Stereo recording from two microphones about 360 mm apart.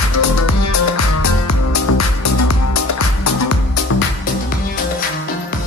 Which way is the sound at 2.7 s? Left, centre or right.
Left.